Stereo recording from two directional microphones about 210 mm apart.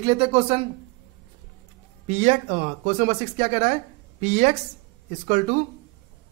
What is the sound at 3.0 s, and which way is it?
A man's voice, 35° right (ahead or behind).